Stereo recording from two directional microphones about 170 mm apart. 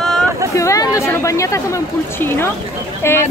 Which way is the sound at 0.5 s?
20° left (ahead or behind).